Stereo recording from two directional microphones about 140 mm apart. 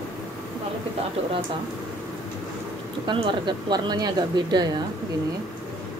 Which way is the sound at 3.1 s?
35° right (ahead or behind).